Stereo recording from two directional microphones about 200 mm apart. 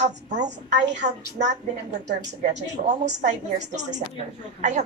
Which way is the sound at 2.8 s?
40° right (ahead or behind).